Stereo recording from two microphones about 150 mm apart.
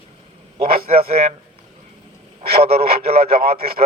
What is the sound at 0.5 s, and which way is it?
Speech, 40° right (ahead or behind).